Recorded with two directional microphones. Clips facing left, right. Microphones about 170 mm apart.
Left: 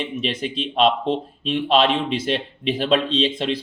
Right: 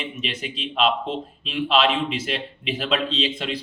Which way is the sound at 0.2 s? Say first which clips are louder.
Left 6 dB; 35° left (ahead or behind).